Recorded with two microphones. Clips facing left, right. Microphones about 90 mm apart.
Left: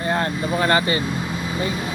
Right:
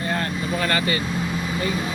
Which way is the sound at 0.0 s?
25° left (ahead or behind).